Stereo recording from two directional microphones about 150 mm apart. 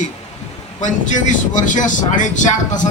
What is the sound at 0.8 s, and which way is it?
Speech, 55° left (ahead or behind).